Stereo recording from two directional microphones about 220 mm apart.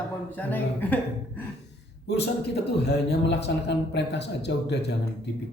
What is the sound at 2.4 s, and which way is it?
Speech, 50° left (ahead or behind).